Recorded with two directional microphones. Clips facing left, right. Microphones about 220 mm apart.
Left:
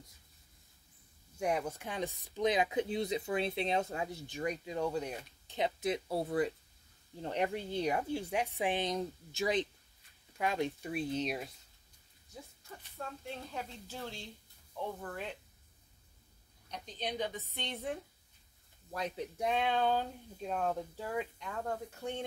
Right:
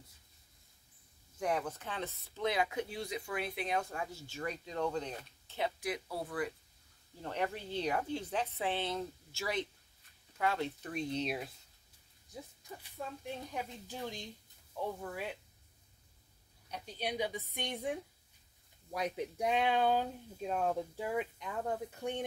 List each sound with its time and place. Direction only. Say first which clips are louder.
1.4 s a woman's voice: left 1 dB; 10° left (ahead or behind)
12.9 s speech: right 1 dB; 15° right (ahead or behind)
16.7 s speech: right 1 dB; 10° right (ahead or behind)
18.9 s speech: right 1 dB; 15° right (ahead or behind)